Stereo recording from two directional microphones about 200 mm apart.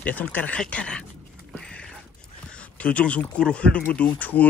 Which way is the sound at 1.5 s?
5° left (ahead or behind).